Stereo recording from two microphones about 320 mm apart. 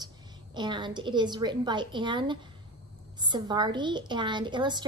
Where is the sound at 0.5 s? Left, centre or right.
Centre.